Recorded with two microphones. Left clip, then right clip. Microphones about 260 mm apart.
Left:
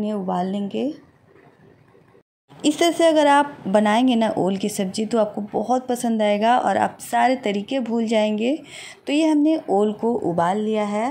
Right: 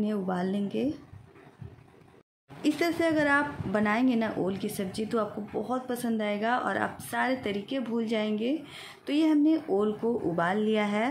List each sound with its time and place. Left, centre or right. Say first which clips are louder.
0.0 s speech: left 7 dB; centre
2.6 s a woman's voice: left 10 dB; left; by 11.1 s centre